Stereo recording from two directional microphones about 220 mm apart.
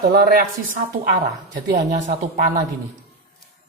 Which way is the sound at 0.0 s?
45° right (ahead or behind).